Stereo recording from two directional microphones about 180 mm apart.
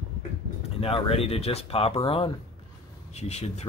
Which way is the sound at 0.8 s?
30° left (ahead or behind).